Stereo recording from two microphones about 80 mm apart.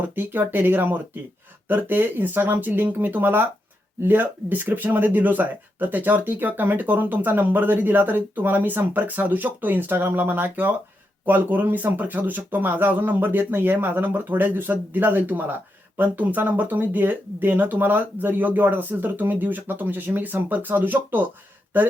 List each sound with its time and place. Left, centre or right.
0.0 s speech: right